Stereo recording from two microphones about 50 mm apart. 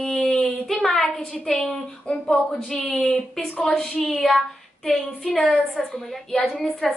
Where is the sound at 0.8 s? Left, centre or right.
Centre.